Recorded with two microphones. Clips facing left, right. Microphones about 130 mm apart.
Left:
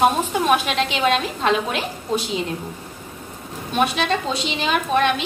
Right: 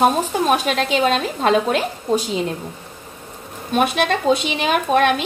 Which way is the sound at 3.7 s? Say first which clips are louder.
Right 2 dB; 55° right (ahead or behind).